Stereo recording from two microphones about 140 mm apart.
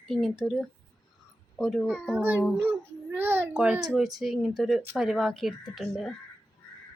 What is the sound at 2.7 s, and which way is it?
A child's voice, 15° right (ahead or behind).